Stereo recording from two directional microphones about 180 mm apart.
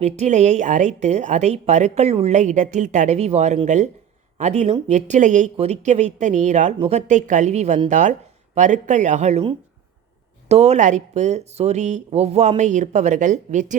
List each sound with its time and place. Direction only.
0.0 s a woman's voice: 40° right (ahead or behind)